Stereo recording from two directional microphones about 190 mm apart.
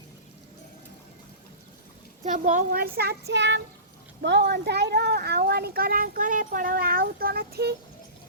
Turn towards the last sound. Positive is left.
turn(degrees=-55)  # may be behind; listen again after turning